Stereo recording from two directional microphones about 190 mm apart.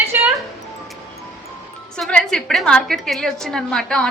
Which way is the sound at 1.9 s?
5° left (ahead or behind).